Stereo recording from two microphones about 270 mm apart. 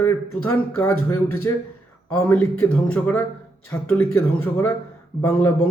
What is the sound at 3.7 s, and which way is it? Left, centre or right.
Speech, centre.